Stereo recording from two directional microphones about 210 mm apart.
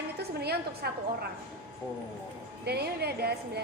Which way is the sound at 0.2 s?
50° right (ahead or behind).